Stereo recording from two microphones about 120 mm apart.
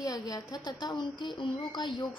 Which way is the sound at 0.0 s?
30° left (ahead or behind).